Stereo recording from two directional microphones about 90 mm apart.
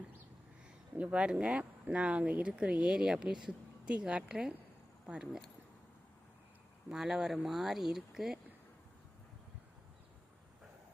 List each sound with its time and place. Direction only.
0.9 s speech: 15° right (ahead or behind)
6.8 s speech: 5° right (ahead or behind)